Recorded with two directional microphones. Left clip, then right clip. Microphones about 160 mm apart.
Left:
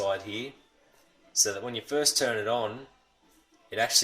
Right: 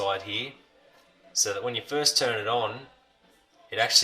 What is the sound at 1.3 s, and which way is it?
Speech, 40° left (ahead or behind).